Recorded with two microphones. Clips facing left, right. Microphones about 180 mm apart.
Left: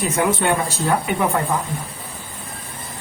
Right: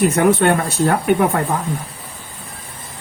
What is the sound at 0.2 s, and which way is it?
Speech, 65° right (ahead or behind).